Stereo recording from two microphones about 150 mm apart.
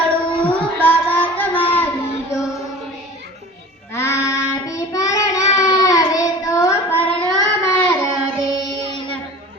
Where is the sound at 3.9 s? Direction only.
20° left (ahead or behind).